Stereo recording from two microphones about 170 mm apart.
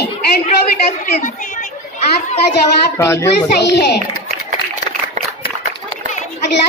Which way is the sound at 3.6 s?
75° left (ahead or behind).